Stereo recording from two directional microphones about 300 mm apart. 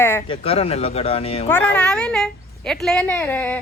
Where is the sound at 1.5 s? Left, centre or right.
Centre.